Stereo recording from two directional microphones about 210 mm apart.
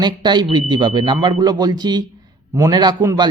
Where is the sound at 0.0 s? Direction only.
20° right (ahead or behind).